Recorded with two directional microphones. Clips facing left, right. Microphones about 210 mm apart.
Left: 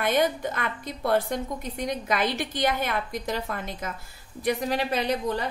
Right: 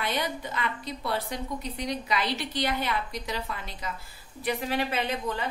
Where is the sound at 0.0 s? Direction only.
50° left (ahead or behind).